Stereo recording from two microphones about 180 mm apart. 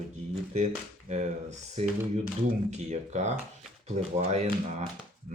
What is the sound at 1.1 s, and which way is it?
Speech, 40° right (ahead or behind).